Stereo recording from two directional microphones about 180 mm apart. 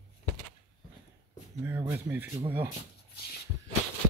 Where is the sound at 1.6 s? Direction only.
10° right (ahead or behind).